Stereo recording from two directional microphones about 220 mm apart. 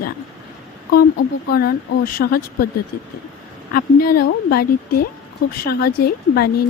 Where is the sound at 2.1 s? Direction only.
45° left (ahead or behind).